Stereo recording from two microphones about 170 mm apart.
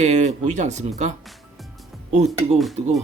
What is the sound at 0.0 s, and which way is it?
Speech, 40° right (ahead or behind).